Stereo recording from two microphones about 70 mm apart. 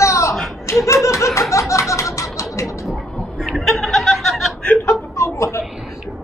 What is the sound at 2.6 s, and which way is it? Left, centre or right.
Chuckle, centre.